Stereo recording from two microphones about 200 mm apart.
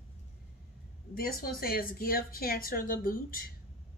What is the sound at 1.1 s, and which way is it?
A woman's voice, 50° left (ahead or behind).